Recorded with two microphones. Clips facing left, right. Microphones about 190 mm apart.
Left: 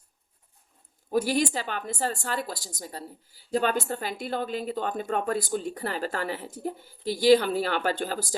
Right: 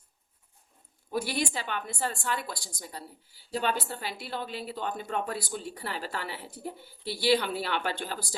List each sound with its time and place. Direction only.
1.1 s a woman's voice: 40° left (ahead or behind)